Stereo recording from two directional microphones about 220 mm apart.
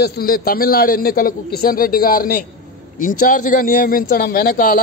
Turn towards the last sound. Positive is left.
turn(degrees=40)  # may be behind; listen again after turning